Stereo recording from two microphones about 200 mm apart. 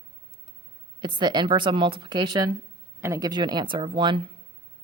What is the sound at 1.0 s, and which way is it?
A woman's voice, 20° right (ahead or behind).